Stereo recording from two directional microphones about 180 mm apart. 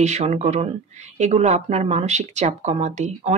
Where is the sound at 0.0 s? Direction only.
40° right (ahead or behind).